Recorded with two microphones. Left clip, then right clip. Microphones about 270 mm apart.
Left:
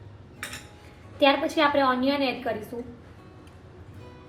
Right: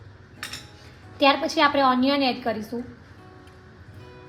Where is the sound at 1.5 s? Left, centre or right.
Right.